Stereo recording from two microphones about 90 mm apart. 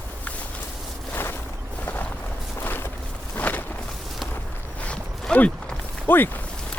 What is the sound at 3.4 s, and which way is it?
Walk, 20° left (ahead or behind).